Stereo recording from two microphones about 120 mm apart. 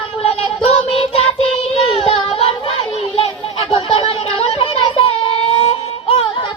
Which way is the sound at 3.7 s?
50° left (ahead or behind).